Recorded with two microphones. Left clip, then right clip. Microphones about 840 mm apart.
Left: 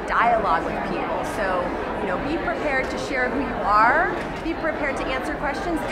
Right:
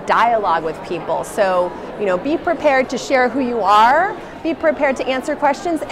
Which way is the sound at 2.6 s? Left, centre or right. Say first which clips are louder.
Right 8 dB; right.